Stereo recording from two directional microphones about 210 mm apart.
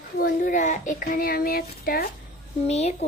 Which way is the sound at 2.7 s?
30° left (ahead or behind).